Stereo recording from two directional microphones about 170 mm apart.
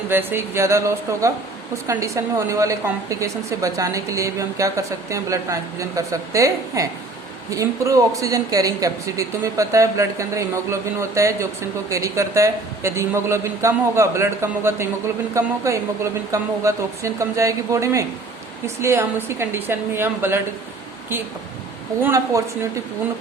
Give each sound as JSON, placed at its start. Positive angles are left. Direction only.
{"t": 0.1, "sound": "a woman's voice", "side_deg": -10}
{"t": 22.0, "sound": "a woman's voice", "side_deg": -20}